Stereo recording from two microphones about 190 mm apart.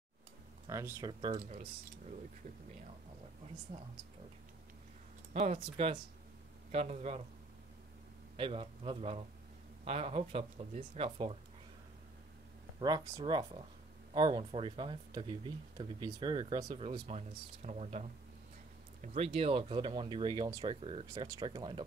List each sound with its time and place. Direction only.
0.7 s speech: 15° right (ahead or behind)
5.3 s speech: 35° right (ahead or behind)
8.4 s speech: 25° right (ahead or behind)
12.8 s speech: 20° right (ahead or behind)
17.6 s speech: 35° right (ahead or behind)